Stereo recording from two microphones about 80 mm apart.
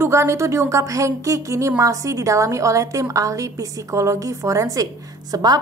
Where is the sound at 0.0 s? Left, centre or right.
Right.